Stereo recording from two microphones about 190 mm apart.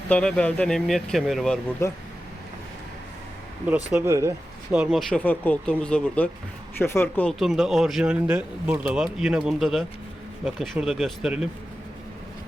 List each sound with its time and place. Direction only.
0.1 s speech: 5° left (ahead or behind)
1.8 s speech: 15° left (ahead or behind)
3.9 s speech: 15° right (ahead or behind)
4.8 s speech: centre (ahead or behind)